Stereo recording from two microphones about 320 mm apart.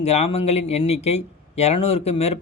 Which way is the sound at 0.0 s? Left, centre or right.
Centre.